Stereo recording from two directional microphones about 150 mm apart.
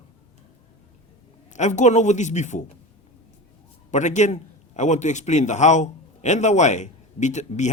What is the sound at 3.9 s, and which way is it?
A man's voice, 50° left (ahead or behind).